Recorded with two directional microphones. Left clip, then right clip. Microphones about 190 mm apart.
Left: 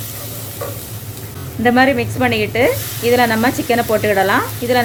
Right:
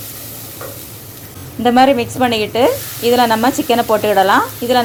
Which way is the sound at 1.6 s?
20° right (ahead or behind).